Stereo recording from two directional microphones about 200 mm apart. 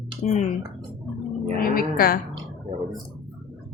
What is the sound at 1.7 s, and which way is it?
Speech, 45° left (ahead or behind).